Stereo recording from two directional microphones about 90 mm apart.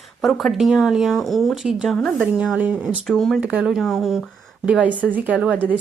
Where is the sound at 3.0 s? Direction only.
5° left (ahead or behind).